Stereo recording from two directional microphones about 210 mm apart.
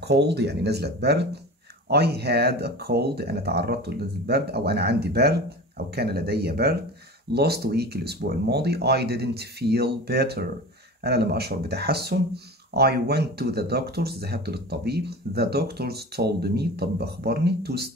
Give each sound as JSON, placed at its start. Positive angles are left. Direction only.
{"t": 0.0, "sound": "speech", "side_deg": -55}